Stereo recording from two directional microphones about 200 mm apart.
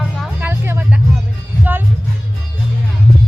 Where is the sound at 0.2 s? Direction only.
10° right (ahead or behind).